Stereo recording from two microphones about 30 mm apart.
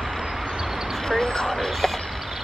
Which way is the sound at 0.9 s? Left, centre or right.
Centre.